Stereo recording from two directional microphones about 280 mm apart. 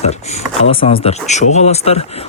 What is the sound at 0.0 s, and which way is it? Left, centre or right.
Speech, left.